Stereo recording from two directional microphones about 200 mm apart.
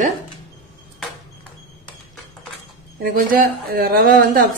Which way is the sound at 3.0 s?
45° right (ahead or behind).